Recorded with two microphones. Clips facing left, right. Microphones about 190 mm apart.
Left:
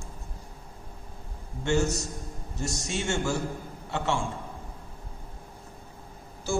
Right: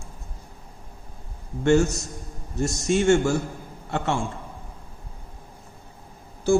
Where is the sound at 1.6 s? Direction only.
55° right (ahead or behind).